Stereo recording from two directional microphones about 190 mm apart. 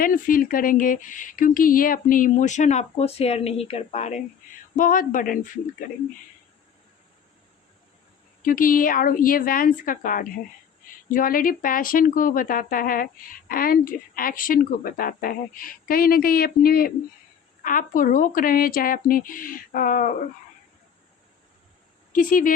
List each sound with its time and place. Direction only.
0.0 s speech: 45° left (ahead or behind)
8.4 s speech: 45° left (ahead or behind)
22.1 s speech: 45° left (ahead or behind)